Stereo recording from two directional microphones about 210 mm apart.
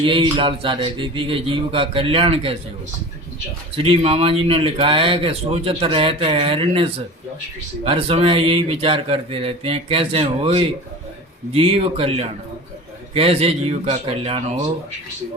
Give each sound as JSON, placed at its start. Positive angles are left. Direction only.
{"t": 0.0, "sound": "speech", "side_deg": -25}
{"t": 3.8, "sound": "speech", "side_deg": -25}
{"t": 7.9, "sound": "speech", "side_deg": -25}